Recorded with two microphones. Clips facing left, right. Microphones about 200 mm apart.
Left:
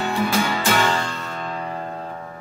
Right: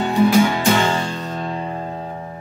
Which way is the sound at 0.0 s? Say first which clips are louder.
Right 7 dB; 15° right (ahead or behind).